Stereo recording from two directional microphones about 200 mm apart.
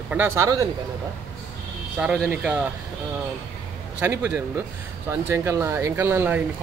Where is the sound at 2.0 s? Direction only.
5° right (ahead or behind).